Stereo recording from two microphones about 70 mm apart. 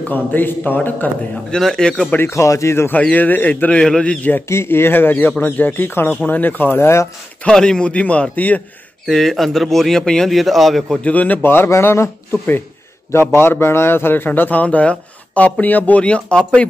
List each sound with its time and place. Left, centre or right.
0.0 s a man's voice: left
1.5 s a man's voice: centre
2.2 s speech: left
2.9 s a man's voice: left
3.8 s a man's voice: centre
4.5 s a man's voice: left
7.4 s a man's voice: centre
9.0 s speech: centre
11.1 s a man's voice: left